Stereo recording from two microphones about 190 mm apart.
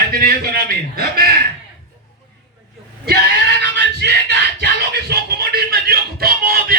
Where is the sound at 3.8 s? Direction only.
60° right (ahead or behind).